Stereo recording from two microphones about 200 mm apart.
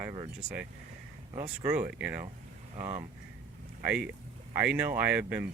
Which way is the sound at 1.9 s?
5° right (ahead or behind).